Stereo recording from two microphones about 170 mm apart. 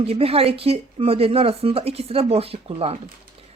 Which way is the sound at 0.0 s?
35° right (ahead or behind).